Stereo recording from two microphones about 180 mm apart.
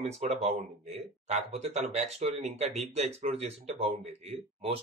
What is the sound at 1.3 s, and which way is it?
Speech, 40° right (ahead or behind).